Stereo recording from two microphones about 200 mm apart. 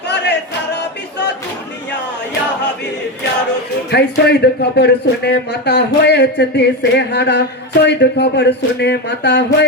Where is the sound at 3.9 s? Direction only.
55° left (ahead or behind).